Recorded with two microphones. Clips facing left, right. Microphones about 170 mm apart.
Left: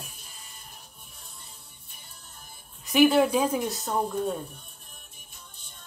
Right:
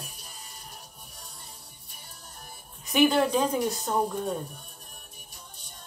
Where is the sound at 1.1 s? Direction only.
45° right (ahead or behind).